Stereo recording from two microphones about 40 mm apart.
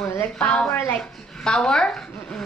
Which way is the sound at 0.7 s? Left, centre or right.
Left.